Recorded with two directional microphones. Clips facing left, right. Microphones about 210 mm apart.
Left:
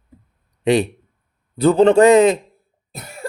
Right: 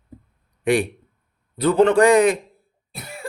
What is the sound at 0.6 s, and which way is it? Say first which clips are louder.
A man's voice: left 3 dB; 20° left (ahead or behind).